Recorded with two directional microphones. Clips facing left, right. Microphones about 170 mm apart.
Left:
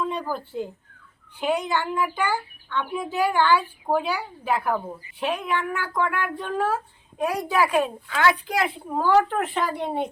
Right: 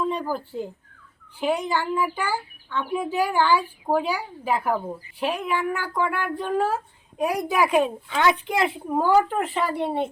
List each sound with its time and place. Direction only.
0.0 s a child's voice: 10° right (ahead or behind)